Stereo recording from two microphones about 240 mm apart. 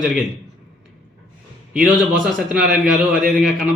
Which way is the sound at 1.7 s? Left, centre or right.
Centre.